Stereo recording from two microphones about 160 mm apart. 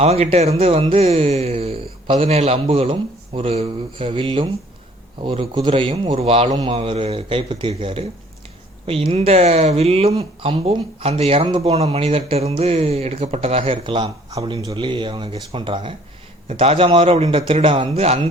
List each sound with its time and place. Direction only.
0.0 s speech: 40° right (ahead or behind)